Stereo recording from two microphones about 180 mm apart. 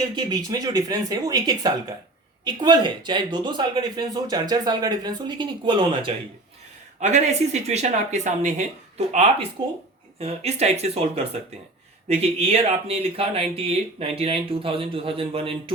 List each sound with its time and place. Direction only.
0.3 s speech: 20° right (ahead or behind)
7.0 s speech: 40° right (ahead or behind)
9.6 s speech: 25° right (ahead or behind)
10.2 s speech: 35° right (ahead or behind)